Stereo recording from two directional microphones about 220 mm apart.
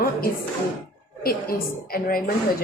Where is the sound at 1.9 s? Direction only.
40° left (ahead or behind).